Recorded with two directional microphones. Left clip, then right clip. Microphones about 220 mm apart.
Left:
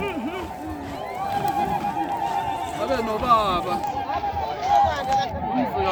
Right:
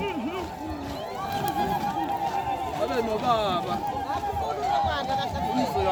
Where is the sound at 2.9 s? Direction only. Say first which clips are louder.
Left 6 dB; 45° left (ahead or behind).